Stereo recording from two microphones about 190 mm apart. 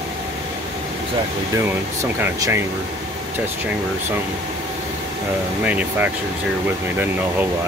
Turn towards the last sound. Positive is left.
turn(degrees=-10)  # may be behind; listen again after turning